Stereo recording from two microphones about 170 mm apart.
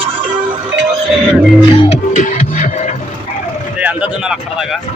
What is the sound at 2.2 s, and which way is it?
Music, 50° left (ahead or behind).